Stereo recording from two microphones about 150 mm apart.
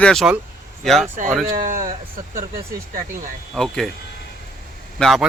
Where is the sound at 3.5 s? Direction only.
Centre (ahead or behind).